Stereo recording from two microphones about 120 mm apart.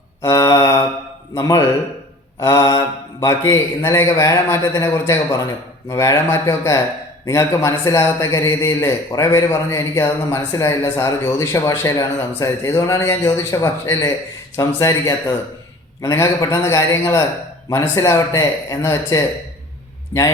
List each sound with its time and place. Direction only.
0.2 s mantra: 30° left (ahead or behind)
1.4 s a man's voice: 30° left (ahead or behind)
2.4 s mantra: 25° left (ahead or behind)
3.8 s a man's voice: 25° left (ahead or behind)